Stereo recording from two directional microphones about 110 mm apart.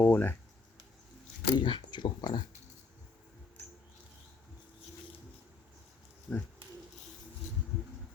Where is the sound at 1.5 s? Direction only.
45° left (ahead or behind).